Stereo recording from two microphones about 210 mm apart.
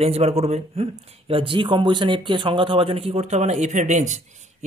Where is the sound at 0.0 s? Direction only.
30° right (ahead or behind).